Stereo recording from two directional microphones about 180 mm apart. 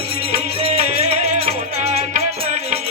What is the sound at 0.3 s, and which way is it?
Music, 35° right (ahead or behind).